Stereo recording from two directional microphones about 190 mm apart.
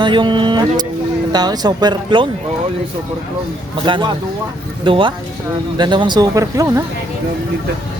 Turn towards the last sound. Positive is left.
turn(degrees=-20)  # may be behind; listen again after turning